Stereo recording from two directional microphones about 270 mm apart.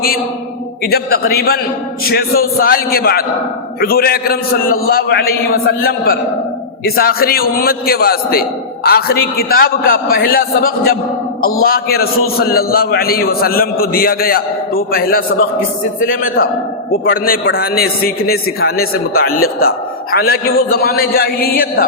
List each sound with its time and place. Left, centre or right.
0.9 s a man's voice: left